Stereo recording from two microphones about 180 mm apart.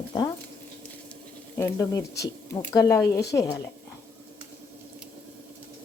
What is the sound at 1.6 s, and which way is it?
Speech, 15° left (ahead or behind).